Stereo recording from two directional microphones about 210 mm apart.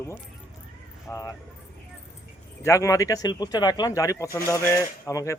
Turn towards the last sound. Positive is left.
turn(degrees=15)  # may be behind; listen again after turning